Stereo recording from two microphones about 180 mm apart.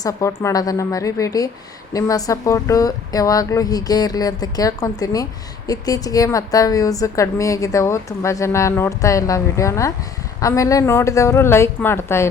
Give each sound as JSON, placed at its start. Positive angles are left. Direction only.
{"t": 0.0, "sound": "a woman's voice", "side_deg": 15}